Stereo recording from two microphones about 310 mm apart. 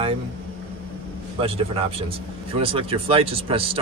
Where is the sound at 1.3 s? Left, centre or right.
Centre.